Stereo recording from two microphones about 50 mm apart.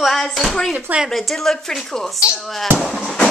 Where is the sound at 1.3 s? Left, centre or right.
Centre.